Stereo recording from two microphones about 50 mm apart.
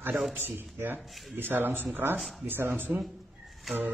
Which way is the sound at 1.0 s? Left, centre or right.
Centre.